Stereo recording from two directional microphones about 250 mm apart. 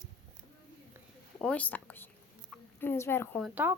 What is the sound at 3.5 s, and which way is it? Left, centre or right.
Speech, centre.